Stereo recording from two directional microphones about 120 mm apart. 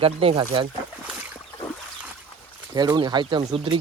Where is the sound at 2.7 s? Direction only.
35° right (ahead or behind).